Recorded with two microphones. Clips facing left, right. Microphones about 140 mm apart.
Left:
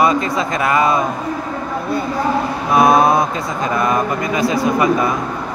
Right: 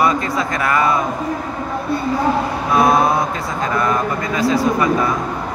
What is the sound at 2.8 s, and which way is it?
Speech, 15° left (ahead or behind).